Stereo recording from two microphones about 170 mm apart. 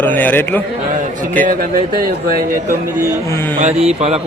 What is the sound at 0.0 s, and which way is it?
Speech, 10° left (ahead or behind).